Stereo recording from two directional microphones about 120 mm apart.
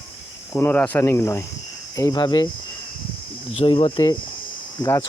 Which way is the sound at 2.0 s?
35° left (ahead or behind).